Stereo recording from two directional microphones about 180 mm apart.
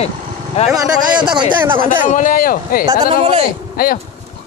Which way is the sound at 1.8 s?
45° left (ahead or behind).